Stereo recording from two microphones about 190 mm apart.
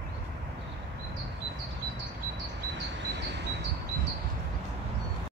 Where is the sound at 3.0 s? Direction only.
65° right (ahead or behind).